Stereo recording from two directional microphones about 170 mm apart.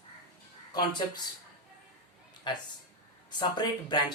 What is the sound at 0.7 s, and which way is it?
Speech, 25° left (ahead or behind).